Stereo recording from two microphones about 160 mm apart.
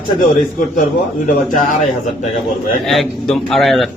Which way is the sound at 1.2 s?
55° left (ahead or behind).